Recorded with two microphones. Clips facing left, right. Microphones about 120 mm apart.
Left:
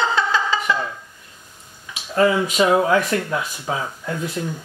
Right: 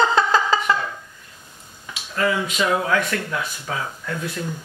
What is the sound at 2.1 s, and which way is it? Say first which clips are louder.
Speech: left 5 dB; 30° left (ahead or behind).